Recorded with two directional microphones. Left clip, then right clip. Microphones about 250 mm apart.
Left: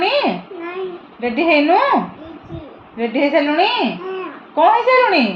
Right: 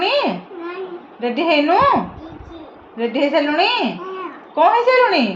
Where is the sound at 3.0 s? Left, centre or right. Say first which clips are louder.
Left 1 dB; centre.